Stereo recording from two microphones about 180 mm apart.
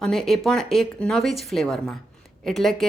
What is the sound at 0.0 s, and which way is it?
A woman's voice, centre (ahead or behind).